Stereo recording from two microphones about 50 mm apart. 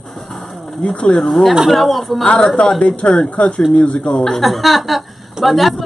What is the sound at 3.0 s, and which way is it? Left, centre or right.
Speech, left.